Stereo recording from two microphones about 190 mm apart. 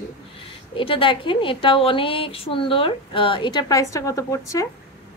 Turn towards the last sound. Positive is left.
turn(degrees=15)  # may be behind; listen again after turning